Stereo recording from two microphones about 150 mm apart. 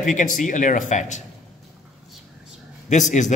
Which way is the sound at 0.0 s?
60° left (ahead or behind).